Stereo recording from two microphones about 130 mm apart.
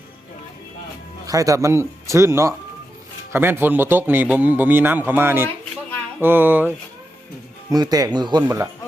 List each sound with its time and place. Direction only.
1.3 s speech: 25° right (ahead or behind)
7.7 s speech: 30° right (ahead or behind)